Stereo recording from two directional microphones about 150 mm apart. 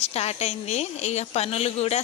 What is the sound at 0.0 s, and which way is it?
Speech, 45° left (ahead or behind).